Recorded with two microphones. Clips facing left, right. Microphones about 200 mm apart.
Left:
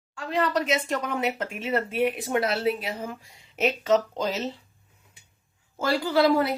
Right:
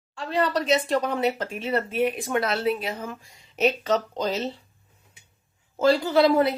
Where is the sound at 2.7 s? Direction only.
10° left (ahead or behind).